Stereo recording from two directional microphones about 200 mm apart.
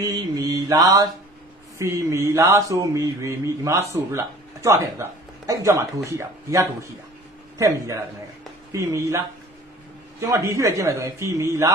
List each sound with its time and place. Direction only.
0.0 s mantra: 20° right (ahead or behind)
1.8 s speech: 15° right (ahead or behind)
10.3 s speech: 15° right (ahead or behind)